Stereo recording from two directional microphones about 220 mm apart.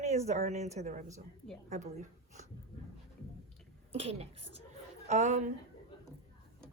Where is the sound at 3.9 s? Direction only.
25° right (ahead or behind).